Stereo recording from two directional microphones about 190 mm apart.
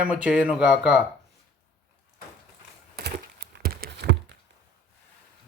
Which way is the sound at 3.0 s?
55° right (ahead or behind).